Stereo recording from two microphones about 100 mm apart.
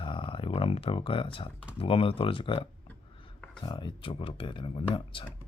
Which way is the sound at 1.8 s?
70° left (ahead or behind).